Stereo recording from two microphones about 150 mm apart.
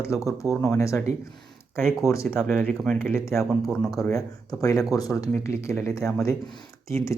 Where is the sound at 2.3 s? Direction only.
Centre (ahead or behind).